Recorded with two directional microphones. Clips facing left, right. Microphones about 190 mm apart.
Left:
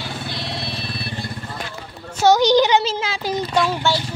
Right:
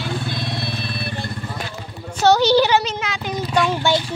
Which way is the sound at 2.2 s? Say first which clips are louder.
Even; 10° left (ahead or behind).